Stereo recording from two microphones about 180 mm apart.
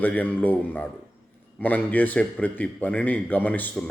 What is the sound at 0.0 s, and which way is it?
A man's voice, 10° left (ahead or behind).